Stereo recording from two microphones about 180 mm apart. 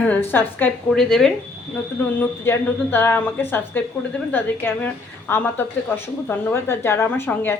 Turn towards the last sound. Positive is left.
turn(degrees=10)  # may be behind; listen again after turning